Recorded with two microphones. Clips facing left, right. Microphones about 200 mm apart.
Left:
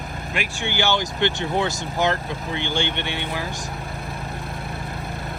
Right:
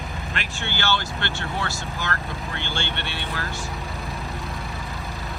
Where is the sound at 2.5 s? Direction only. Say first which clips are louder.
Left 7 dB; 15° left (ahead or behind).